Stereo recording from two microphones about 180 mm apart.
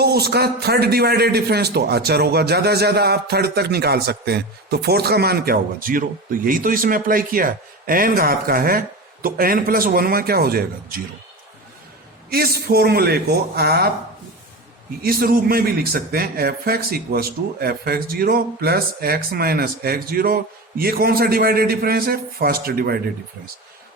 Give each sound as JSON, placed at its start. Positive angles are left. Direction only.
{"t": 0.0, "sound": "a man's voice", "side_deg": -60}
{"t": 12.3, "sound": "a man's voice", "side_deg": -60}
{"t": 15.0, "sound": "a man's voice", "side_deg": -55}